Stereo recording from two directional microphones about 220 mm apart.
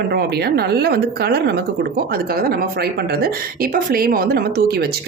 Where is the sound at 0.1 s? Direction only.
45° right (ahead or behind).